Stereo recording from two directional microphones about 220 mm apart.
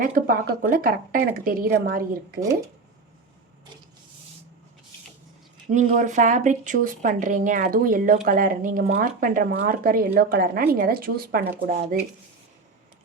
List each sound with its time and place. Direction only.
0.0 s speech: 40° right (ahead or behind)
5.7 s speech: 35° right (ahead or behind)